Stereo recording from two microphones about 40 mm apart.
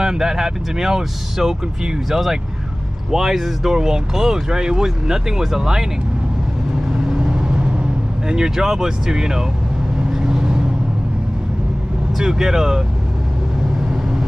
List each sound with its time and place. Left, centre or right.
0.0 s speech: centre
7.1 s vehicle: centre
8.3 s speech: centre
9.9 s vehicle: centre
12.2 s speech: centre